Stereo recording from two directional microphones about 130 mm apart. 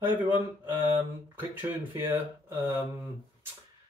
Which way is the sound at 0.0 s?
15° right (ahead or behind).